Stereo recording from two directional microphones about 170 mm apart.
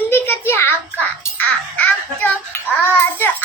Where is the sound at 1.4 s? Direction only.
10° left (ahead or behind).